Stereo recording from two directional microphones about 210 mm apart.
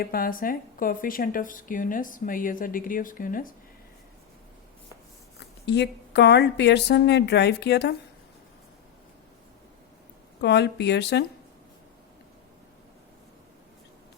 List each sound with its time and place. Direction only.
0.0 s speech: 45° left (ahead or behind)
5.4 s speech: 55° left (ahead or behind)
10.4 s speech: 55° left (ahead or behind)